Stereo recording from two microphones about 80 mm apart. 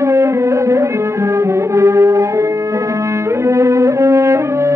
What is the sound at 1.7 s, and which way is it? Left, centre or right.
Music, right.